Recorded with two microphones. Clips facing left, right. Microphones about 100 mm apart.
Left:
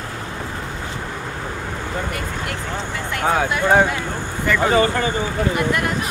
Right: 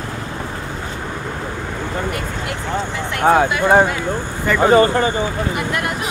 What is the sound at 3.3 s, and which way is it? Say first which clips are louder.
Speech: right 6 dB; 45° right (ahead or behind).